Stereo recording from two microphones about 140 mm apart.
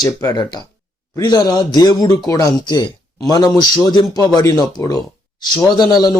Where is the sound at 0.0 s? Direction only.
25° left (ahead or behind).